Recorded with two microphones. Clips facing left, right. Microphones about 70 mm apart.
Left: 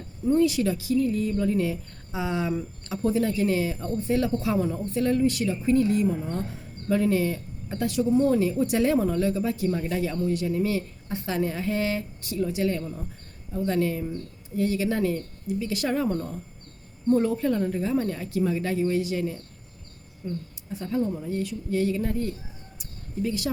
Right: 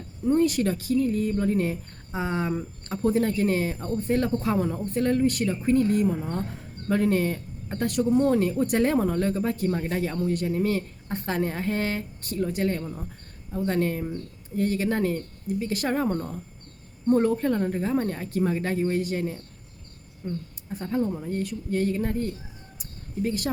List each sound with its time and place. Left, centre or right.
0.3 s speech: right
20.7 s speech: right